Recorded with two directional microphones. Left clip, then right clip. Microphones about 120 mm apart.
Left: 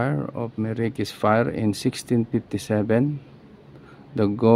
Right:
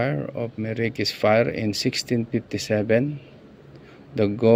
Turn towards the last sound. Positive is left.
turn(degrees=30)  # may be behind; listen again after turning